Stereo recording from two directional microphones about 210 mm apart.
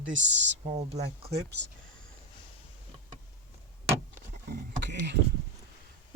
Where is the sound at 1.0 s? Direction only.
50° right (ahead or behind).